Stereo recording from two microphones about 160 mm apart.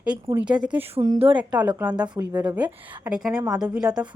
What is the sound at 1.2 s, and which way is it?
Speech, 30° right (ahead or behind).